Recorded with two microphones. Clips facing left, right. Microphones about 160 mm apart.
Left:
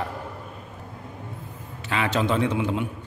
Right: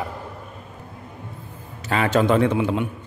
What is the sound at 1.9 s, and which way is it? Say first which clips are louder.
A man's voice: right 5 dB; 45° right (ahead or behind).